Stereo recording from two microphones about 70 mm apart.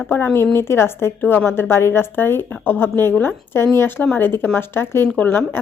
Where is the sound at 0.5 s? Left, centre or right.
Left.